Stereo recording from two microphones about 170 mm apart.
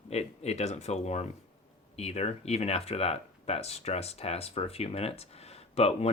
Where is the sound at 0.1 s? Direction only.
40° left (ahead or behind).